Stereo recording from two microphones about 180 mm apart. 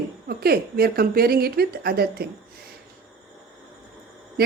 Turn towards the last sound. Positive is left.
turn(degrees=-60)  # may be behind; listen again after turning